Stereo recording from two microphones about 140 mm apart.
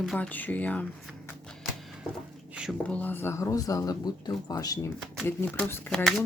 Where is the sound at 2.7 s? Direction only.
10° left (ahead or behind); by 4.9 s 25° left (ahead or behind).